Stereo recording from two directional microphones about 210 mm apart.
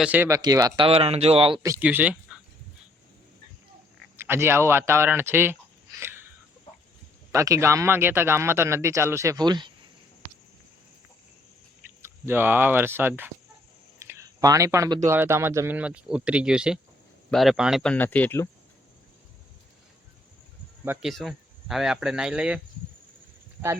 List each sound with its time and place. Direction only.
0.0 s speech: 10° right (ahead or behind)
4.2 s speech: 10° right (ahead or behind)
7.3 s speech: 15° right (ahead or behind)
12.0 s speech: 10° right (ahead or behind)
14.0 s a sound: 15° right (ahead or behind)
15.0 s speech: 10° right (ahead or behind); by 18.4 s 10° left (ahead or behind)
20.8 s speech: 10° right (ahead or behind)